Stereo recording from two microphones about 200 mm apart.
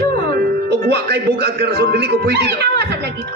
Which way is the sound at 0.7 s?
55° right (ahead or behind).